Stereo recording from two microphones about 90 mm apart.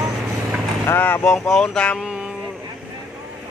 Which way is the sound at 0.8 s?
30° left (ahead or behind).